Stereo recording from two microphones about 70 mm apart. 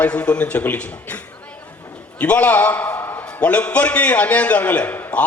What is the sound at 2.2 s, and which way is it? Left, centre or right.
A man's voice, left.